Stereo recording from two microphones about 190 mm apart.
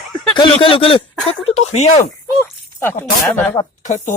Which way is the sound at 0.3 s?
25° left (ahead or behind).